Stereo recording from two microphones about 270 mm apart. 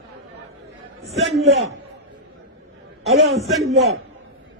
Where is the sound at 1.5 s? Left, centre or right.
Right.